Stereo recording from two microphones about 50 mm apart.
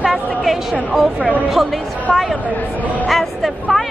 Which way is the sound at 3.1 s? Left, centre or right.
Centre.